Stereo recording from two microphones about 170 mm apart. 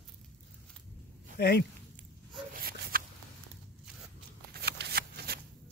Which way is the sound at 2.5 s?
60° right (ahead or behind).